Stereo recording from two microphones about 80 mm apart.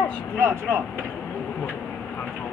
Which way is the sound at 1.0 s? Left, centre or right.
Centre.